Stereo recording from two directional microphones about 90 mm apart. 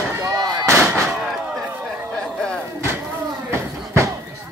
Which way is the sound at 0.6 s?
30° right (ahead or behind).